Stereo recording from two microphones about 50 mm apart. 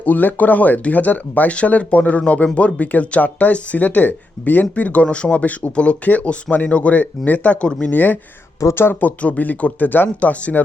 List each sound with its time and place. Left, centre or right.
0.0 s speech: left
4.6 s speech: left
7.9 s speech: left
8.7 s speech: left
9.0 s speech: left